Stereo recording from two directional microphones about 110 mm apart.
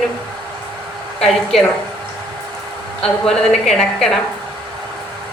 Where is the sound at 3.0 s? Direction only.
5° left (ahead or behind).